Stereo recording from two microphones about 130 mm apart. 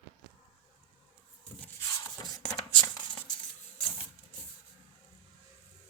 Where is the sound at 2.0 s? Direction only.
30° left (ahead or behind).